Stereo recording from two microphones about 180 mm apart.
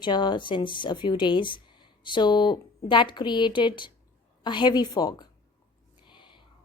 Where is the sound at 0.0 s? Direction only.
25° left (ahead or behind).